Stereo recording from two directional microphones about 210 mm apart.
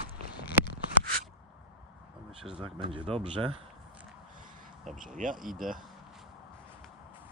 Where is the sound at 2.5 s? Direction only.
25° right (ahead or behind).